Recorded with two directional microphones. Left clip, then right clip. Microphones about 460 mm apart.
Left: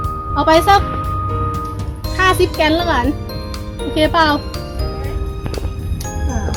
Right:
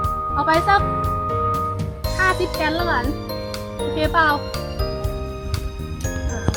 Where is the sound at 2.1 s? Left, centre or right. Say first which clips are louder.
Left 6 dB; centre.